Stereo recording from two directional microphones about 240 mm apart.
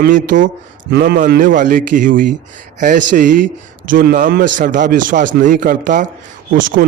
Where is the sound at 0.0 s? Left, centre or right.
Right.